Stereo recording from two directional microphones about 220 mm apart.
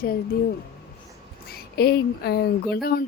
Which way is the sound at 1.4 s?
45° left (ahead or behind).